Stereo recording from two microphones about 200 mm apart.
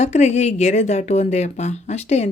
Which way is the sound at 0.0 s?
35° left (ahead or behind).